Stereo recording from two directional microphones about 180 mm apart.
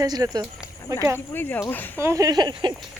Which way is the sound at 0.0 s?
20° right (ahead or behind).